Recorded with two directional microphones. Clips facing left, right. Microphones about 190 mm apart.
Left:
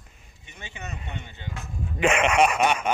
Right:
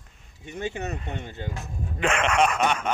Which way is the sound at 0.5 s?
45° right (ahead or behind).